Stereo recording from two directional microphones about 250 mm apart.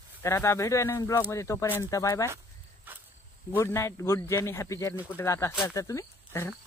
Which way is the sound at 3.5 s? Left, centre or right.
Centre.